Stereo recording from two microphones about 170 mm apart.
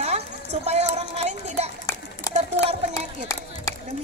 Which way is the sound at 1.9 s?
15° left (ahead or behind).